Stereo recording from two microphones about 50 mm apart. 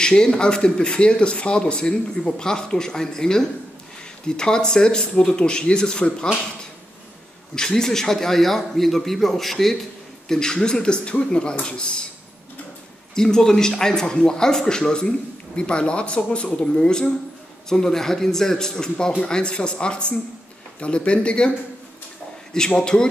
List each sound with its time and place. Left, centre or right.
0.0 s speech: centre
7.5 s speech: centre
13.1 s speech: centre